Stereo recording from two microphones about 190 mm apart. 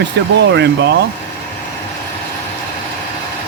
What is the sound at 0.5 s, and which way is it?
Speech, 65° right (ahead or behind).